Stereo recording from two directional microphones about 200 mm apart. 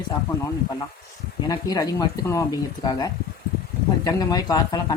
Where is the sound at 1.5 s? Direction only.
20° left (ahead or behind).